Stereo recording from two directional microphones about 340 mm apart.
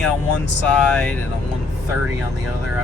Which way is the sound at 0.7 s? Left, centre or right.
Centre.